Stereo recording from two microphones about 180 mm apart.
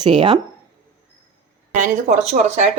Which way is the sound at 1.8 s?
45° right (ahead or behind).